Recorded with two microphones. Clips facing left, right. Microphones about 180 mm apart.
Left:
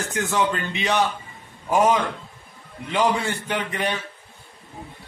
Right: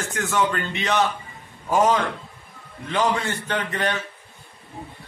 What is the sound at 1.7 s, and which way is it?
A man's voice, 15° left (ahead or behind).